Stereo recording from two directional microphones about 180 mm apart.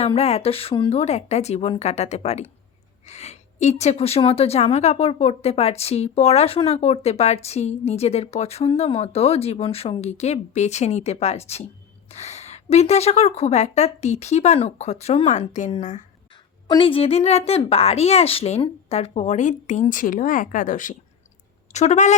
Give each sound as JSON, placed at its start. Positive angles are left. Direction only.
{"t": 0.0, "sound": "a woman's voice", "side_deg": 35}
{"t": 16.6, "sound": "a woman's voice", "side_deg": 30}